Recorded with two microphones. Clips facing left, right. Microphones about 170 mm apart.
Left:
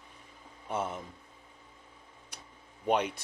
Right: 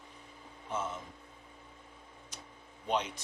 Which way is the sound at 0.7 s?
60° left (ahead or behind).